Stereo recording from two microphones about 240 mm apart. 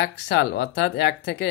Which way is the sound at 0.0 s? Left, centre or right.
Left.